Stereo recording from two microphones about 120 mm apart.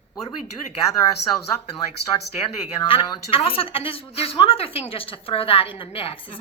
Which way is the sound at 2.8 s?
50° left (ahead or behind).